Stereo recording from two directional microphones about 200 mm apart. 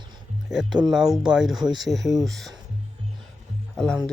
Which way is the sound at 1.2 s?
5° right (ahead or behind).